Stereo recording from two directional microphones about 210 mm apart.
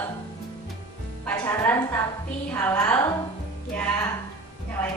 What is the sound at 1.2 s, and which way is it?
A man's voice, 10° left (ahead or behind).